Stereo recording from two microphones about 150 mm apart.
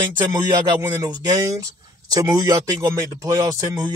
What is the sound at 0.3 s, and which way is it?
Speech, 25° right (ahead or behind).